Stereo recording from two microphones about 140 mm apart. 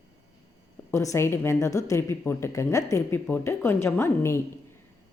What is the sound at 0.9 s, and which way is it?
A woman's voice, 20° left (ahead or behind).